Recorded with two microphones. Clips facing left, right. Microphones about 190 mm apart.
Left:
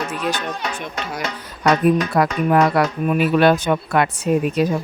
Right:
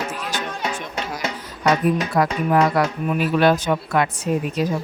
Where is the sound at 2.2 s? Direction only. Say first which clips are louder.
Left 2 dB; 65° left (ahead or behind).